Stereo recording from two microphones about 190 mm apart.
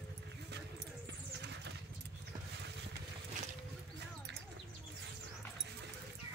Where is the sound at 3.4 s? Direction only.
40° right (ahead or behind).